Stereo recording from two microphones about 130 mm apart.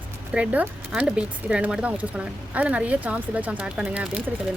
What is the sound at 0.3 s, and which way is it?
Speech, 10° right (ahead or behind).